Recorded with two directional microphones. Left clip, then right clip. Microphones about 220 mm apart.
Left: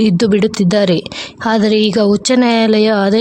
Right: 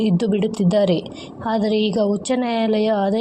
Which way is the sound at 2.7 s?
20° left (ahead or behind).